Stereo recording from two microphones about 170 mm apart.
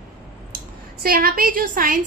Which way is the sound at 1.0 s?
60° right (ahead or behind).